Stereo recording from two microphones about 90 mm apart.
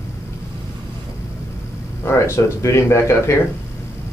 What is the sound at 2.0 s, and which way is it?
Speech, 30° left (ahead or behind).